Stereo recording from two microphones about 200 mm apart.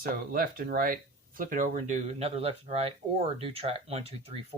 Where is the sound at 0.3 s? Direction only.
45° right (ahead or behind).